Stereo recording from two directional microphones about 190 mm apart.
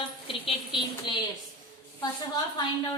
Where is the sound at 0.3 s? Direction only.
25° left (ahead or behind).